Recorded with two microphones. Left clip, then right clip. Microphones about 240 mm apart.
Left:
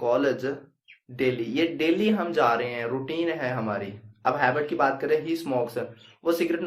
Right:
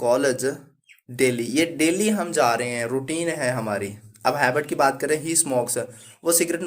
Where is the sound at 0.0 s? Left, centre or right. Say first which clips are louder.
Right 3 dB; right.